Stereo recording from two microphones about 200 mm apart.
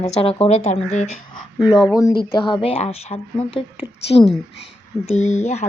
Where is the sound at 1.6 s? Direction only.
Centre (ahead or behind).